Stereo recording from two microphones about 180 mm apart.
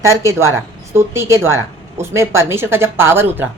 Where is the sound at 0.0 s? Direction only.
15° right (ahead or behind).